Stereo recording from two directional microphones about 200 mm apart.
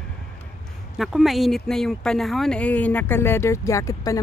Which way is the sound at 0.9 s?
Centre (ahead or behind).